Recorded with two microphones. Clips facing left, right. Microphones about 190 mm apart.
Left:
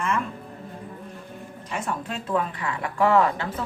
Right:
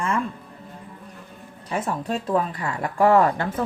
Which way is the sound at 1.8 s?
35° right (ahead or behind).